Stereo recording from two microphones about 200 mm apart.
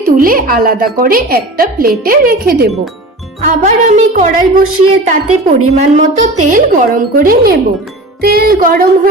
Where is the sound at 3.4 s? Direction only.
35° right (ahead or behind).